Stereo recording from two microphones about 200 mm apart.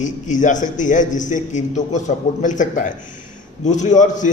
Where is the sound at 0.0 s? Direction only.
40° left (ahead or behind).